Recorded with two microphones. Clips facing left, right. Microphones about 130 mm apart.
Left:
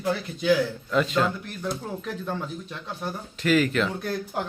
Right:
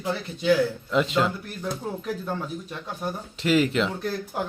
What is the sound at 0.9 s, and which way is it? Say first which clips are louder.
Speech: left 1 dB; 20° right (ahead or behind).